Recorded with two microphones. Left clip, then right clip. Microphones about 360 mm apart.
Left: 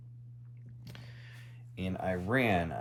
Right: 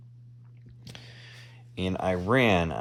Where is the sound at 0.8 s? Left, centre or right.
Centre.